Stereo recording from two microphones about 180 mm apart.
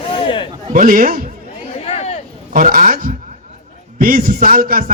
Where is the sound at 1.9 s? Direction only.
35° left (ahead or behind).